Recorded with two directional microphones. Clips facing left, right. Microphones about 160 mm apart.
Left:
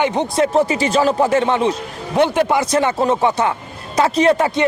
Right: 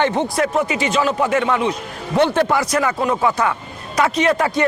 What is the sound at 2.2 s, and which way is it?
A man's voice, 15° left (ahead or behind).